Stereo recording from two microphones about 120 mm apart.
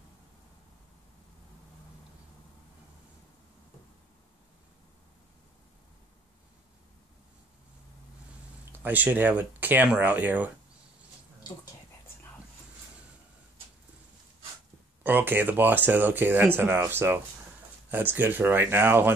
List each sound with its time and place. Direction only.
8.7 s speech: 15° right (ahead or behind)
15.0 s speech: 15° right (ahead or behind)